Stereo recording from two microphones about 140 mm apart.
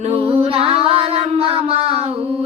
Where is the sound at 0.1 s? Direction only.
45° right (ahead or behind).